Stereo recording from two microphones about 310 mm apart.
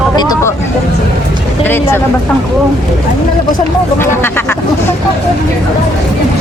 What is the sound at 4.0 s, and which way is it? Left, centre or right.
Speech, centre.